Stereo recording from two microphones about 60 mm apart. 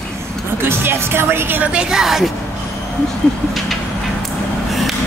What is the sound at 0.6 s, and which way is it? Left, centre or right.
Speech, right.